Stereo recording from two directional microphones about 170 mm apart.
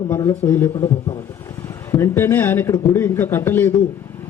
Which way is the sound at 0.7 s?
30° left (ahead or behind).